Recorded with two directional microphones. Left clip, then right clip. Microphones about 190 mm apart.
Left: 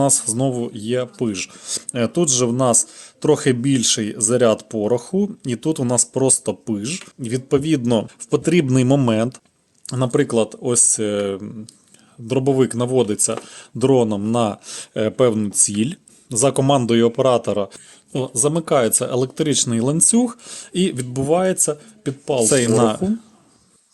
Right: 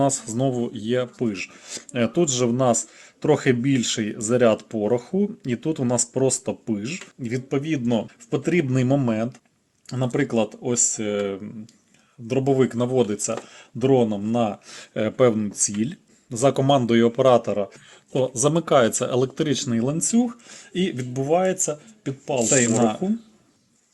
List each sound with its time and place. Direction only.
0.0 s speech: 25° left (ahead or behind)
14.9 s speech: 25° left (ahead or behind)
16.4 s speech: 25° left (ahead or behind)
18.1 s speech: 20° left (ahead or behind); by 23.1 s 45° left (ahead or behind)